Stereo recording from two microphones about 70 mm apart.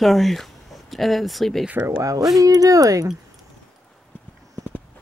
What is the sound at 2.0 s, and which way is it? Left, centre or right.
Speech, right.